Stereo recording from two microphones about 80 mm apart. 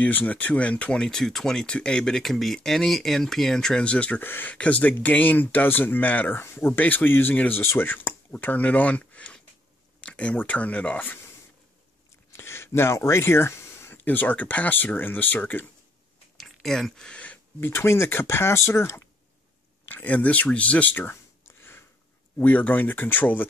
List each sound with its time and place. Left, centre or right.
0.0 s speech: centre
12.3 s a sound: left
13.9 s speech: left
16.3 s a sound: centre
17.6 s speech: left
19.9 s speech: centre